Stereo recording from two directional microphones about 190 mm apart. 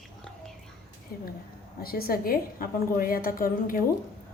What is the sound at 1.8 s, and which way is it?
A woman's voice, 50° left (ahead or behind).